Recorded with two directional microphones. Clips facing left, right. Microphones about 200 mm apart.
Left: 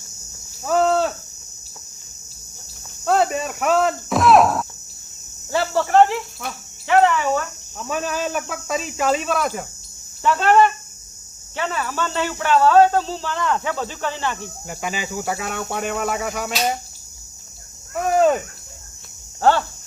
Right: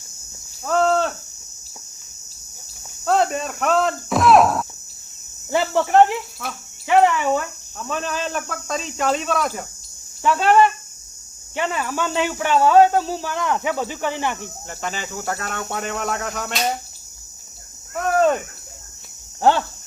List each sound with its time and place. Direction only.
0.6 s cricket: 5° left (ahead or behind)
3.1 s cricket: 5° left (ahead or behind)
5.5 s speech: 15° right (ahead or behind)
6.4 s speech: 5° right (ahead or behind)
7.8 s speech: 10° left (ahead or behind); by 14.5 s 15° right (ahead or behind)
14.7 s cricket: 10° left (ahead or behind)
19.4 s speech: 15° right (ahead or behind)